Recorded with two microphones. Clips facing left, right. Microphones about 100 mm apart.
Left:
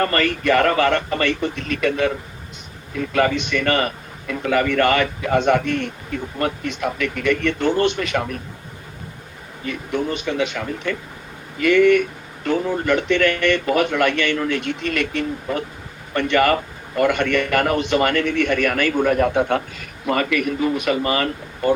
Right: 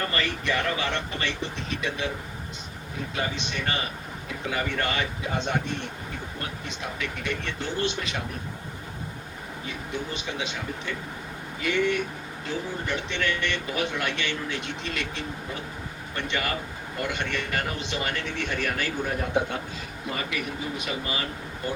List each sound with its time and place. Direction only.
0.0 s a man's voice: 55° left (ahead or behind)
9.6 s a man's voice: 55° left (ahead or behind)